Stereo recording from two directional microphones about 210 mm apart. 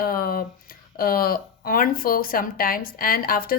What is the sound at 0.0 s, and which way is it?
Speech, 45° left (ahead or behind).